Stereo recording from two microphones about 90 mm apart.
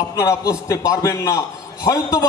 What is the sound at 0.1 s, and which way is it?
A man's voice, 40° left (ahead or behind).